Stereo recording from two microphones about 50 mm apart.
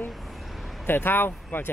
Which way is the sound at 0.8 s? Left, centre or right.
Left.